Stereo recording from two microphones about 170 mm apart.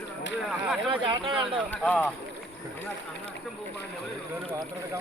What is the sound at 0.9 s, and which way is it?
Speech, 30° right (ahead or behind).